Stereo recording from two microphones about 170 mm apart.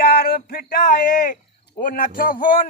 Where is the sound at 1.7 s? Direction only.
55° left (ahead or behind).